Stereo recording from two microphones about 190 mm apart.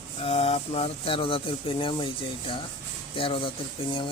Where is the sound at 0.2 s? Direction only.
35° left (ahead or behind).